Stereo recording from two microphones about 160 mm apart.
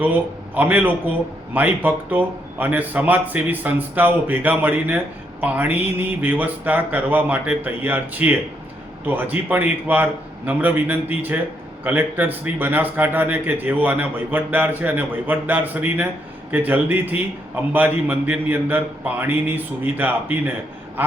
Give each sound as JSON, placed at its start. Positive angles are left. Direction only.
{"t": 0.0, "sound": "a man's voice", "side_deg": -10}